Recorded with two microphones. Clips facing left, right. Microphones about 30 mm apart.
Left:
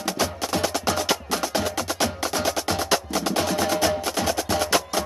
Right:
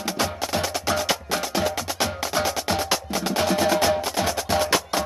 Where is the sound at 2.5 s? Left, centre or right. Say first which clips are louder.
Even; centre.